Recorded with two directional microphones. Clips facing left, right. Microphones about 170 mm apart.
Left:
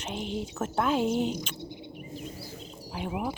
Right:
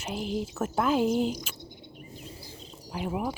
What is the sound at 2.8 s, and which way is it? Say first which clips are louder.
Speech: right 1 dB; 5° left (ahead or behind).